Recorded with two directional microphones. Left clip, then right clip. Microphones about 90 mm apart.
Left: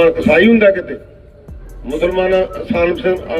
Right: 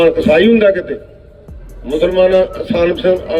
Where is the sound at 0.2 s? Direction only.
35° right (ahead or behind).